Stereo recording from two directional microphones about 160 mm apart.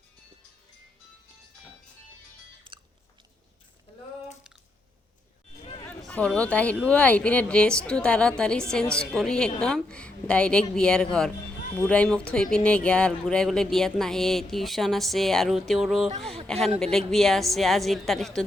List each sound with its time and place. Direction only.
2.7 s biting: 30° right (ahead or behind)
6.0 s a woman's voice: 5° left (ahead or behind)